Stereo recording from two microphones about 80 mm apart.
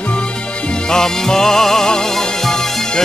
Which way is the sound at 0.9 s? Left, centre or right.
Centre.